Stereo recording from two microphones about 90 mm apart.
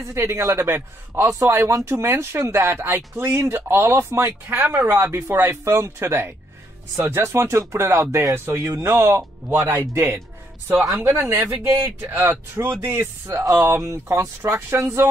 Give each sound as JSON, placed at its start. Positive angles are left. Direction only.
{"t": 0.0, "sound": "speech", "side_deg": -30}